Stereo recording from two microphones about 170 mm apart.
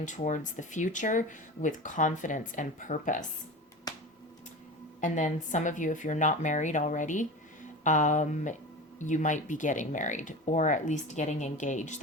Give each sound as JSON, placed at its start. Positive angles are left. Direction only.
{"t": 0.0, "sound": "speech", "side_deg": 45}
{"t": 3.9, "sound": "a sound", "side_deg": 20}
{"t": 4.9, "sound": "speech", "side_deg": 50}